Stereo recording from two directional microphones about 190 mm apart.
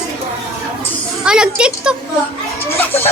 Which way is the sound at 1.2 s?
5° right (ahead or behind).